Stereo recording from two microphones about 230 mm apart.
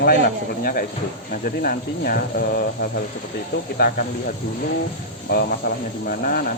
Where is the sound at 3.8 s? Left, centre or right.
Left.